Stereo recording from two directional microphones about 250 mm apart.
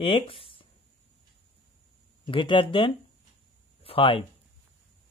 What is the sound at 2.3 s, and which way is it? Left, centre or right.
Speech, centre.